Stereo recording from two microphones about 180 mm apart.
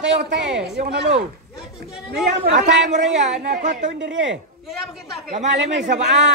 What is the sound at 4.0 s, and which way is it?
Speech, 90° right.